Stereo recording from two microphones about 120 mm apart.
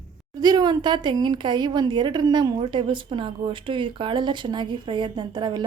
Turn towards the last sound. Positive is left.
turn(degrees=-40)  # may be behind; listen again after turning